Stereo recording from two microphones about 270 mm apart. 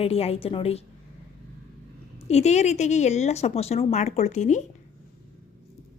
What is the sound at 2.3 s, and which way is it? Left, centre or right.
A woman's voice, left.